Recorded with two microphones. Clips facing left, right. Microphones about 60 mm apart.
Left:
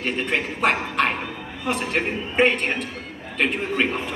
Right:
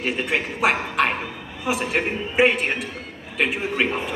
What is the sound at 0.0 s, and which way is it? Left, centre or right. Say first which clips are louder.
A man's voice: even; centre.